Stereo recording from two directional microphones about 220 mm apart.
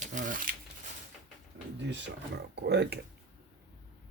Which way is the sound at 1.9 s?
50° right (ahead or behind).